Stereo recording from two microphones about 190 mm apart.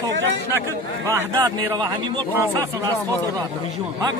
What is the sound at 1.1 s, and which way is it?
A man's voice, 20° right (ahead or behind).